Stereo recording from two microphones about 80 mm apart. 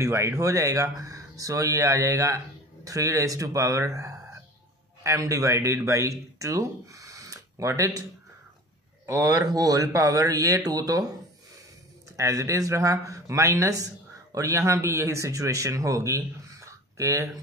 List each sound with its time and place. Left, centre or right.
0.0 s a man's voice: right
9.0 s a man's voice: right
12.2 s a man's voice: right